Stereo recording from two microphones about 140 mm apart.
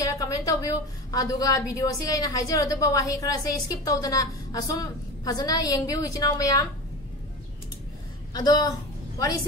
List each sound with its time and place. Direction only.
0.1 s a woman's voice: 25° left (ahead or behind)
8.3 s a woman's voice: 30° left (ahead or behind)